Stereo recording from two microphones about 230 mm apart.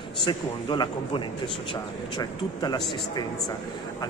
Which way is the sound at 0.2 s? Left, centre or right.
Centre.